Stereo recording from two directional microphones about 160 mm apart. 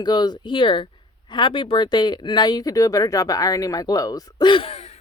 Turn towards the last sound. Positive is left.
turn(degrees=40)  # may be behind; listen again after turning